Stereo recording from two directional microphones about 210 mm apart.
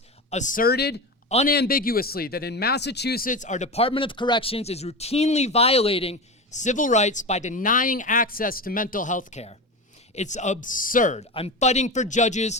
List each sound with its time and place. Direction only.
0.3 s speech: 35° left (ahead or behind)